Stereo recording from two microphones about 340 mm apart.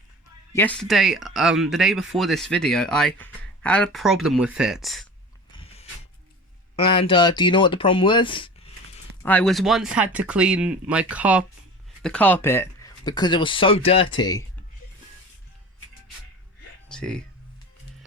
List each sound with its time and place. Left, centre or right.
0.5 s speech: centre
5.5 s mechanisms: centre
6.7 s speech: centre
9.2 s speech: centre
16.9 s speech: centre